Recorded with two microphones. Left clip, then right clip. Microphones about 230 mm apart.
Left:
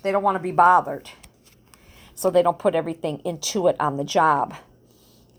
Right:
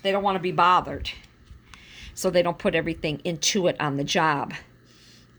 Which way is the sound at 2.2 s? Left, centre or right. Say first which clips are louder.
Left 4 dB; right.